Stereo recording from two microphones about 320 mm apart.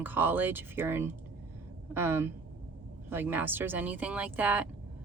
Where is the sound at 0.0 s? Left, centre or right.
Centre.